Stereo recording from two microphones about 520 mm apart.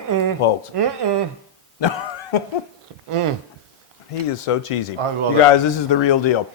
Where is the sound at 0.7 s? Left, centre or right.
Right.